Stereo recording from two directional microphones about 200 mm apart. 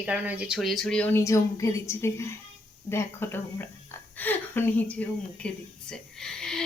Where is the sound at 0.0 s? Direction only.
5° right (ahead or behind).